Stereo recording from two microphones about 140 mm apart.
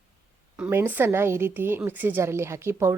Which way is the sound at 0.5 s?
15° right (ahead or behind).